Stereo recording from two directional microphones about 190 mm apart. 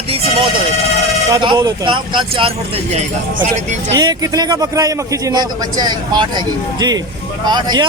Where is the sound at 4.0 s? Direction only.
20° right (ahead or behind).